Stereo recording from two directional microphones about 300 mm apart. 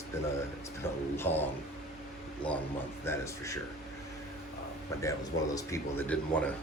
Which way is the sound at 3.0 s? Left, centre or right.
Centre.